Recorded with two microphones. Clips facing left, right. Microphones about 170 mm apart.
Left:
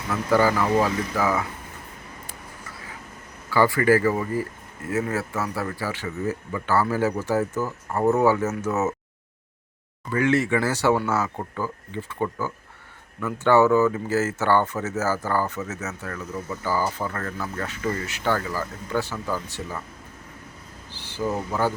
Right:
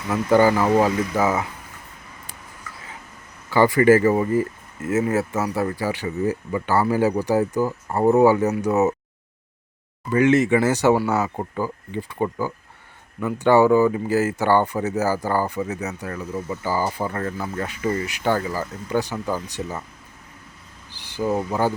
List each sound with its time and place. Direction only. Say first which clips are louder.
0.1 s speech: right 4 dB; 25° right (ahead or behind)
3.5 s speech: right 4 dB; 20° right (ahead or behind)
10.1 s speech: right 5 dB; 20° right (ahead or behind)
20.9 s speech: right 4 dB; 15° right (ahead or behind)